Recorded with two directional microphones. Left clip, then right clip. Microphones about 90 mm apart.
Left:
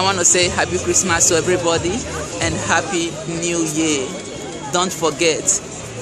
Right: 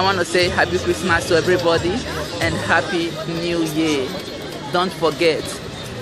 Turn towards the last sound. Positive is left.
turn(degrees=5)  # may be behind; listen again after turning